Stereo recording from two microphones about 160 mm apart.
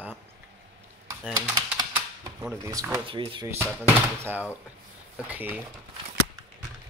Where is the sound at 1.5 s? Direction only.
25° right (ahead or behind).